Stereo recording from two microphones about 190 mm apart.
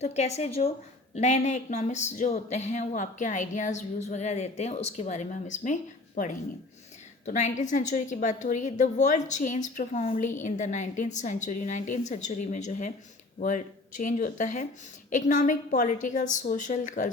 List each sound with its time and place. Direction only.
0.0 s speech: 35° left (ahead or behind)